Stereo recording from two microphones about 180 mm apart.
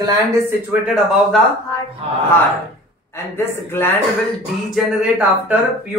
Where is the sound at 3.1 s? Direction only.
15° left (ahead or behind).